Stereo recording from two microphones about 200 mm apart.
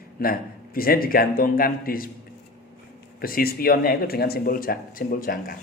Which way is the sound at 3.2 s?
45° left (ahead or behind).